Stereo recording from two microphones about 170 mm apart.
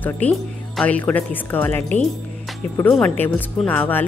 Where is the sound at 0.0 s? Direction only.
5° left (ahead or behind).